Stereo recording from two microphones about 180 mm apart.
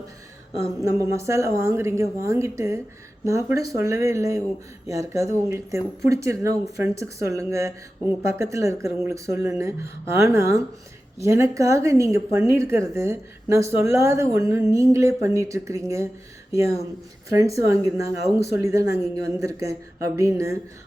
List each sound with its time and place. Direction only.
0.9 s speech: 15° right (ahead or behind)